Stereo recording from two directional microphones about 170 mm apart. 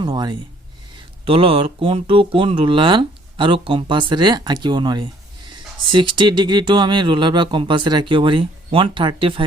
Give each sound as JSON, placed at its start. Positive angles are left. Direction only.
{"t": 0.0, "sound": "speech", "side_deg": -25}